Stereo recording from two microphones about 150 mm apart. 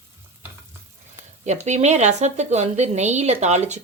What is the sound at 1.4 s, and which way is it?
Speech, 50° right (ahead or behind).